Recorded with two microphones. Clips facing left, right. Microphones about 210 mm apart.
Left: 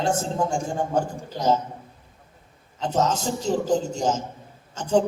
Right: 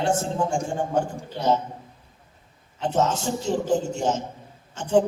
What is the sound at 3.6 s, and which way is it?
Speech, 40° left (ahead or behind).